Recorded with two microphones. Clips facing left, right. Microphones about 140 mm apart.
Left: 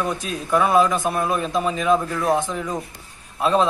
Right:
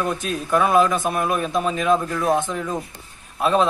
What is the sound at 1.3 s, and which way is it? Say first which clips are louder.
Speech: even; 15° right (ahead or behind).